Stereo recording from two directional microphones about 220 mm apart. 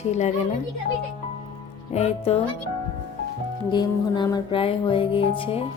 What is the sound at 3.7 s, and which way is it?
Speech, 20° left (ahead or behind).